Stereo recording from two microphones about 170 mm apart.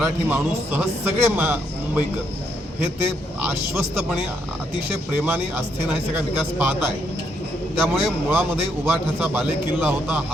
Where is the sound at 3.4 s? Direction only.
15° right (ahead or behind).